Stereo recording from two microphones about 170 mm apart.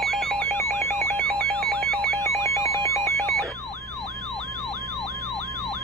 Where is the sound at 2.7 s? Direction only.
15° left (ahead or behind).